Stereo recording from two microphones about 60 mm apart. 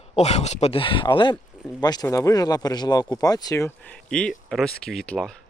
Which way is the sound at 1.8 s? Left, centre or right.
Left.